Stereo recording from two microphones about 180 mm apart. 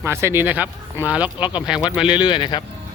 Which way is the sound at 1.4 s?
25° left (ahead or behind).